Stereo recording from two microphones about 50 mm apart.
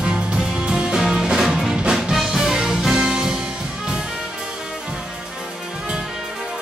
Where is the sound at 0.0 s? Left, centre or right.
Centre.